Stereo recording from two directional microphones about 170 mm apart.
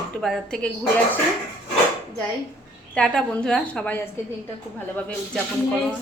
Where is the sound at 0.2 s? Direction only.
Centre (ahead or behind).